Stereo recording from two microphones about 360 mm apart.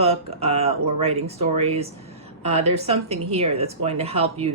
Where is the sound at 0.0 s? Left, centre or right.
Centre.